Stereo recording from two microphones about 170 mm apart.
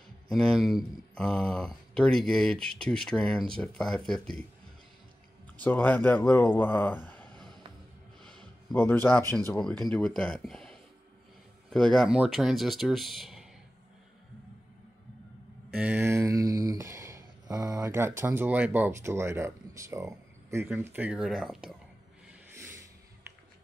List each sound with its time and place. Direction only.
0.3 s speech: centre (ahead or behind)
5.6 s speech: 10° left (ahead or behind)
8.7 s speech: 10° left (ahead or behind)
9.8 s speech: 5° left (ahead or behind)
15.7 s speech: 10° right (ahead or behind)
22.5 s snort: 15° right (ahead or behind)